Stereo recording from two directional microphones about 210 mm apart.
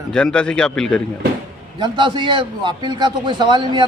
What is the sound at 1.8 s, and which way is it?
A man's voice, 20° right (ahead or behind).